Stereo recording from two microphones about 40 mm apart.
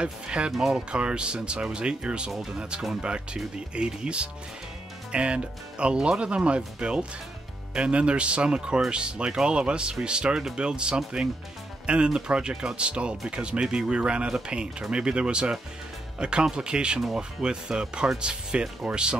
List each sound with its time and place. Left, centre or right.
0.0 s speech: right